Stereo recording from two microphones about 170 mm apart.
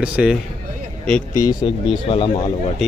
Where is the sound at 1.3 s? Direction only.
20° left (ahead or behind).